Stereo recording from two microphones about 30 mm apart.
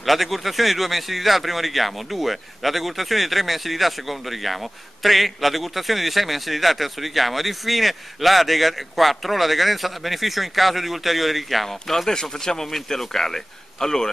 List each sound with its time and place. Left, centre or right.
0.0 s a man's voice: centre
12.1 s speech: centre